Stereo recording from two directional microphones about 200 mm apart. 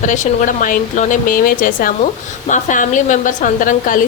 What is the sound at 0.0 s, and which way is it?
A woman's voice, 40° left (ahead or behind).